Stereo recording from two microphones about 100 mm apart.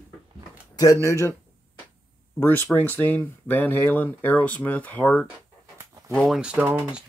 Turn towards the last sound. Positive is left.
turn(degrees=-15)  # may be behind; listen again after turning